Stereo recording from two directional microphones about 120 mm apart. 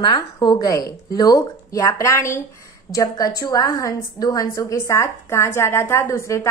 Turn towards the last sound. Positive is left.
turn(degrees=25)  # may be behind; listen again after turning